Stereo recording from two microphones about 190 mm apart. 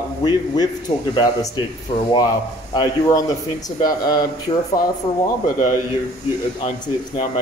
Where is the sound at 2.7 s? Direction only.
20° left (ahead or behind).